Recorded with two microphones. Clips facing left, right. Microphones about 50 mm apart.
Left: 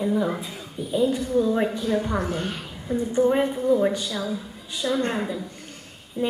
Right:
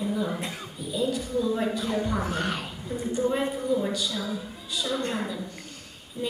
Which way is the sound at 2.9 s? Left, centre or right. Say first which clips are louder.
Left 6 dB; left.